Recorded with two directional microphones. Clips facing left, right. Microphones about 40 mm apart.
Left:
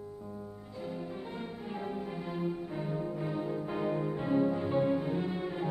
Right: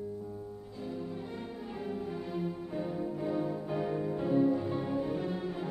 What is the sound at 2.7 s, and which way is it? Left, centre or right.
Music, centre.